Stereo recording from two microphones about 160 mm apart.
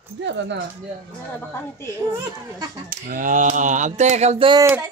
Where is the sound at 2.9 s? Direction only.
60° right (ahead or behind); by 4.6 s 35° right (ahead or behind).